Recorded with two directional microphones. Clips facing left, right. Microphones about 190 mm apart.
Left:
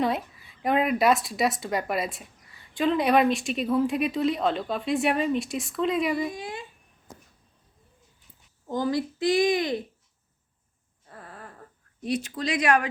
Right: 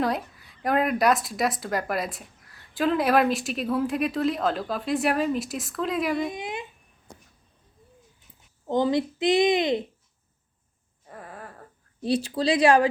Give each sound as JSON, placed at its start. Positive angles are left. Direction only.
{"t": 0.0, "sound": "speech", "side_deg": 0}
{"t": 6.1, "sound": "speech", "side_deg": -20}
{"t": 8.7, "sound": "speech", "side_deg": -20}
{"t": 11.1, "sound": "a sound", "side_deg": -15}
{"t": 12.0, "sound": "speech", "side_deg": -30}